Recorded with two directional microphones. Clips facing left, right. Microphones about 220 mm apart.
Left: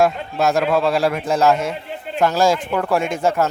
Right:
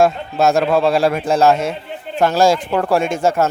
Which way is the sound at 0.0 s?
25° right (ahead or behind).